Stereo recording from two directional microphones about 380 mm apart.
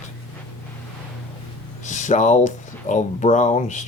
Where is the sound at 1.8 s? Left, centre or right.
Centre.